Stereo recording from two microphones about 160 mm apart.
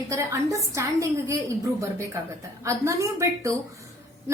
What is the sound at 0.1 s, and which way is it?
A woman's voice, 20° right (ahead or behind).